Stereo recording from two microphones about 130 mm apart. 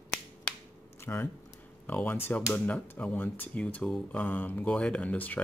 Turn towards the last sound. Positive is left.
turn(degrees=10)  # may be behind; listen again after turning